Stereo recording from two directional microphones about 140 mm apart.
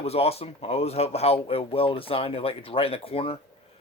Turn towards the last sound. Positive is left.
turn(degrees=45)  # may be behind; listen again after turning